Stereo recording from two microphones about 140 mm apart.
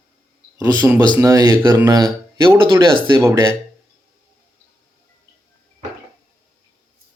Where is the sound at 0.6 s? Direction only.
20° right (ahead or behind).